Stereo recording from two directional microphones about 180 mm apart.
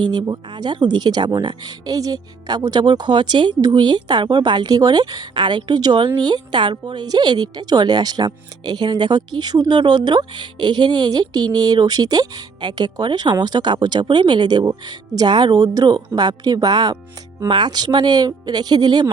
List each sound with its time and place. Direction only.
0.1 s a woman's voice: 25° right (ahead or behind)